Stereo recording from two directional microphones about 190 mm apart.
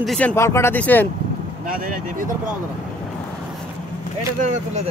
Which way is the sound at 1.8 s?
45° right (ahead or behind).